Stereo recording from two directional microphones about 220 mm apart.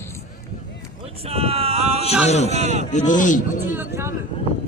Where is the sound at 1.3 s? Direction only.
25° right (ahead or behind).